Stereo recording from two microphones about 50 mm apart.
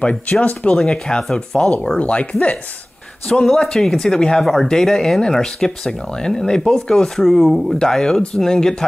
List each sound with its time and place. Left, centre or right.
0.0 s speech: left
0.7 s speech: centre
2.0 s speech: left
3.3 s speech: centre